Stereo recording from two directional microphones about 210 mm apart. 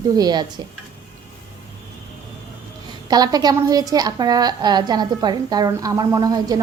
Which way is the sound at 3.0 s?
20° right (ahead or behind).